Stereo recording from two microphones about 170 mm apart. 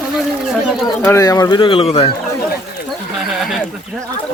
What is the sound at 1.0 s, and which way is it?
Speech, 20° left (ahead or behind).